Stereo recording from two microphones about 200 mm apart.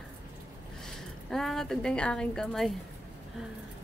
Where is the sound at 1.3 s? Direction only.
Centre (ahead or behind).